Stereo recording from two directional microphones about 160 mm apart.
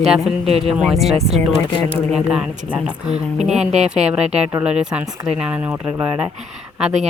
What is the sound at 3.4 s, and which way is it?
Speech, 45° right (ahead or behind).